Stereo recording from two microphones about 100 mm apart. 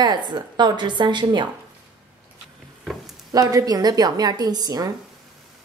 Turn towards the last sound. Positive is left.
turn(degrees=-40)  # may be behind; listen again after turning